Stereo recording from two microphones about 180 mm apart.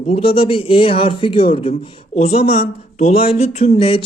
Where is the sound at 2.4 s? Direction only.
55° left (ahead or behind).